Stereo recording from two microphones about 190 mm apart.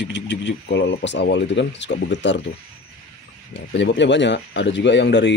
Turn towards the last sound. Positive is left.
turn(degrees=65)  # may be behind; listen again after turning